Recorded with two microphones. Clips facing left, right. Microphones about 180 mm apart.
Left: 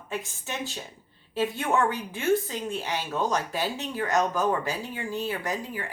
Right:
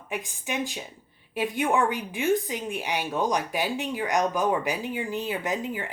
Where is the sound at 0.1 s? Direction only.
15° right (ahead or behind).